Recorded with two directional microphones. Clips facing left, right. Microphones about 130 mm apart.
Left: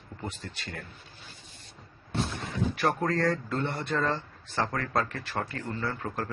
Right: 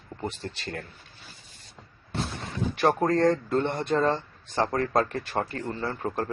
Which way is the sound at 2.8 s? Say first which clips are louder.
Right 6 dB; 30° right (ahead or behind).